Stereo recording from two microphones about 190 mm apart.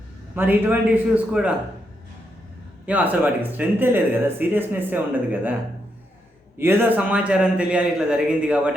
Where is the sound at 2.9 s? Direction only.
10° right (ahead or behind).